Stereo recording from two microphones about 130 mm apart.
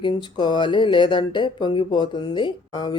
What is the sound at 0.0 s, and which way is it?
Speech, 35° left (ahead or behind).